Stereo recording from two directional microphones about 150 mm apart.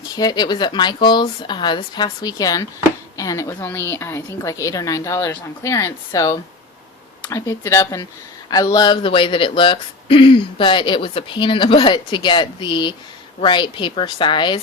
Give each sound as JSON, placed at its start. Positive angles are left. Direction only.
{"t": 0.1, "sound": "a woman's voice", "side_deg": 25}